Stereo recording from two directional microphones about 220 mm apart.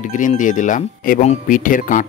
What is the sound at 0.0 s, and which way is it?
Speech, 35° left (ahead or behind).